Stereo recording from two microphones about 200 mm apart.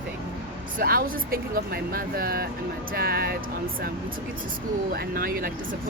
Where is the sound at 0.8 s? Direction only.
45° right (ahead or behind).